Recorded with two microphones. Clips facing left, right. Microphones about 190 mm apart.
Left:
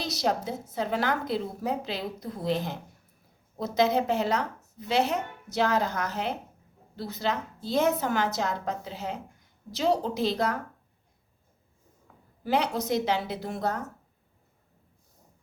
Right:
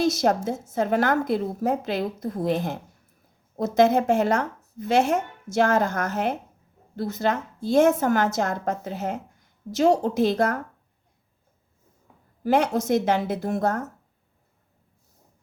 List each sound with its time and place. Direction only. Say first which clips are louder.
0.0 s a woman's voice: right 7 dB; 50° right (ahead or behind)
12.4 s a woman's voice: right 5 dB; 50° right (ahead or behind)